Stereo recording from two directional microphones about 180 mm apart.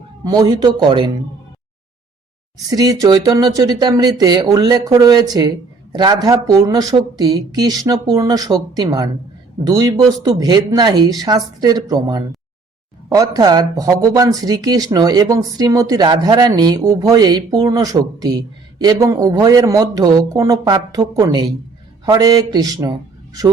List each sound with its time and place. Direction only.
0.3 s speech: 20° right (ahead or behind)
2.6 s speech: 20° right (ahead or behind)